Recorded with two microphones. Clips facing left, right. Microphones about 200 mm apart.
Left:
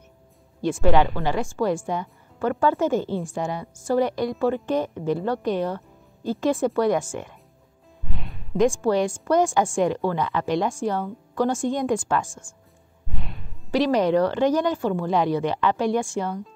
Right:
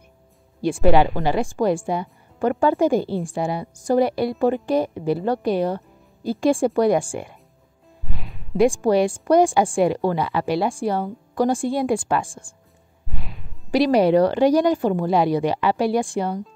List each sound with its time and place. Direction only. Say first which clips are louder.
0.8 s a woman's voice: right 3 dB; 10° right (ahead or behind)
8.1 s music: right 1 dB; 5° right (ahead or behind)
8.6 s a woman's voice: right 3 dB; 15° right (ahead or behind)
12.3 s speech: right 2 dB; 35° right (ahead or behind)
13.1 s music: even; centre (ahead or behind)
13.7 s a woman's voice: right 4 dB; 15° right (ahead or behind)